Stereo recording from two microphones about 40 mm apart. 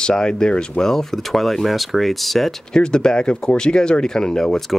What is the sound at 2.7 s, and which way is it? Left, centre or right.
Speech, left.